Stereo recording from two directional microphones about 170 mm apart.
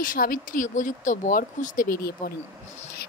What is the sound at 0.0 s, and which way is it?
Speech, 55° left (ahead or behind).